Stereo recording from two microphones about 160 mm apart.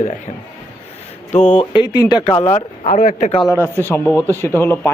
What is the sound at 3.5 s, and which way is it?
A man's voice, 15° left (ahead or behind).